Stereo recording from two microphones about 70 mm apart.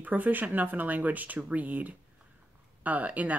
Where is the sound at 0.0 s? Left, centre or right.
Right.